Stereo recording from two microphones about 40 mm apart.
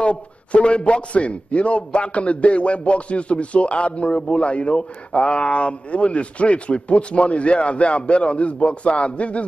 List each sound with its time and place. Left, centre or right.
0.0 s a man's voice: left